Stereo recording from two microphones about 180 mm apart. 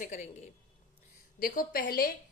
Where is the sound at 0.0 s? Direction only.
45° left (ahead or behind).